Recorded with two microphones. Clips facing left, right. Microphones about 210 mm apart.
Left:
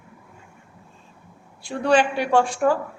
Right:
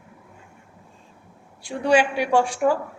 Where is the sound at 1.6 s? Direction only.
10° right (ahead or behind).